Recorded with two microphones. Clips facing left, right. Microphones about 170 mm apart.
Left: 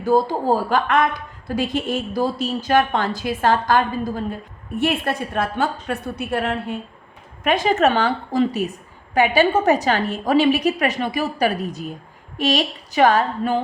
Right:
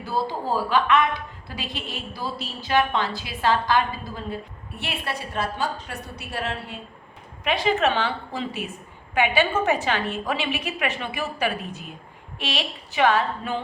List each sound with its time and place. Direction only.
0.0 s a woman's voice: 45° left (ahead or behind)
7.4 s a woman's voice: 45° left (ahead or behind)